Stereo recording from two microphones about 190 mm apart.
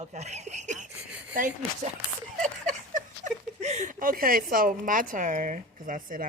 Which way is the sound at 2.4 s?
40° right (ahead or behind).